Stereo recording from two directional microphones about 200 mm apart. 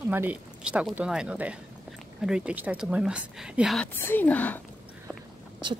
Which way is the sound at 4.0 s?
10° left (ahead or behind).